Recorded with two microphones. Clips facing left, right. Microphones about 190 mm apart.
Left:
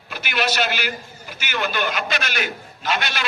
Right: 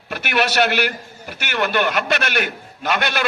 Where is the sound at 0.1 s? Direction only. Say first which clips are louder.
Right 4 dB; 65° right (ahead or behind).